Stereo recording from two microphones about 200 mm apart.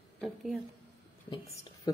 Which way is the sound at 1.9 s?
20° left (ahead or behind).